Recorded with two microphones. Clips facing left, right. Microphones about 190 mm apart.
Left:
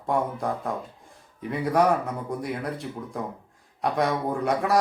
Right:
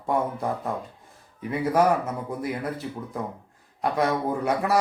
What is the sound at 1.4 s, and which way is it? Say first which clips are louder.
A man's voice: right 1 dB; centre (ahead or behind).